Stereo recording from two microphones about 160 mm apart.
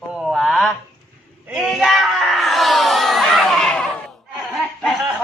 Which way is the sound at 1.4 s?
Centre (ahead or behind).